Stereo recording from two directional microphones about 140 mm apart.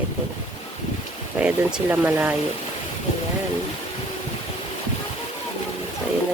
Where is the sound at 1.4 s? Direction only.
10° right (ahead or behind).